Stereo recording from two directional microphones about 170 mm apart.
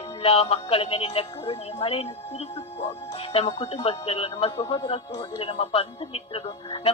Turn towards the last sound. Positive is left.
turn(degrees=35)  # may be behind; listen again after turning